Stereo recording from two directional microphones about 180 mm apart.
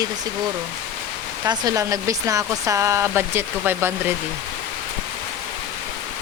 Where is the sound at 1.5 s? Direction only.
20° right (ahead or behind).